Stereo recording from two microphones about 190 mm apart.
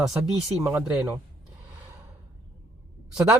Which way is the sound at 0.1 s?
5° right (ahead or behind).